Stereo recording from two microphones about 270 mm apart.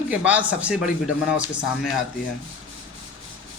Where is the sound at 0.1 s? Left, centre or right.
Centre.